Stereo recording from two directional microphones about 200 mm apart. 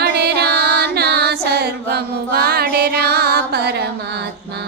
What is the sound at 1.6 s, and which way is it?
Mantra, 50° right (ahead or behind).